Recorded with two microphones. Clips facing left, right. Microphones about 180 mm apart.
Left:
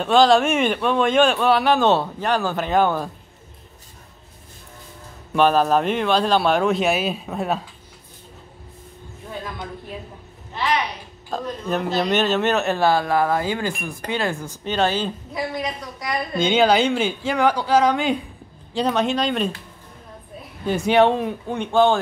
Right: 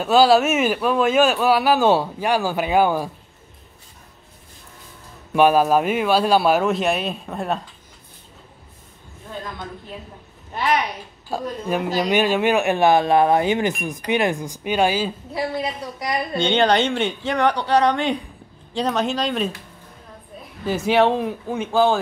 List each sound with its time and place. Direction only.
0.0 s speech: 5° right (ahead or behind)
5.3 s speech: 10° right (ahead or behind)
10.5 s a sound: 50° right (ahead or behind)
11.2 s speech: 10° right (ahead or behind)
15.3 s a woman's voice: 30° right (ahead or behind)
16.3 s speech: 5° left (ahead or behind)
20.6 s speech: centre (ahead or behind)